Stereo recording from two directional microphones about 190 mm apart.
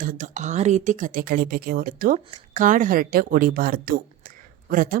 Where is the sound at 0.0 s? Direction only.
45° right (ahead or behind).